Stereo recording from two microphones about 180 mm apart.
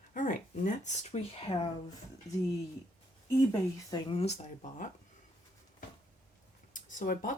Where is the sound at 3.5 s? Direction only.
20° left (ahead or behind); by 4.9 s 40° left (ahead or behind).